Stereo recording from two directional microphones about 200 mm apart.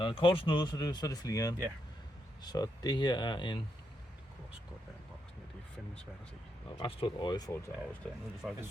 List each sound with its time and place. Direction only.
0.0 s speech: 25° left (ahead or behind)
6.7 s speech: 25° left (ahead or behind)
8.0 s speech: 5° left (ahead or behind)